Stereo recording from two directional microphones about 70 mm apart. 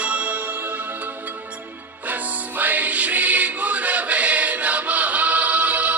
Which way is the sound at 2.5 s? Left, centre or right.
Right.